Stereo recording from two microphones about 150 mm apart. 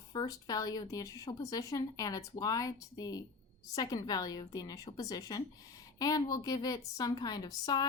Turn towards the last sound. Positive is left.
turn(degrees=25)  # may be behind; listen again after turning